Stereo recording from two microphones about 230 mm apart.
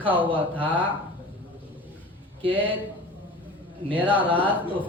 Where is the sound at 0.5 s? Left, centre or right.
Centre.